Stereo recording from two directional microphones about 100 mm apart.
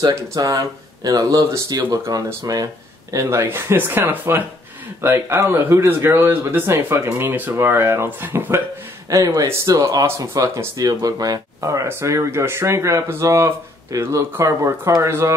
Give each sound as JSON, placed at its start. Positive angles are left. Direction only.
{"t": 0.0, "sound": "speech", "side_deg": -35}
{"t": 9.1, "sound": "speech", "side_deg": -35}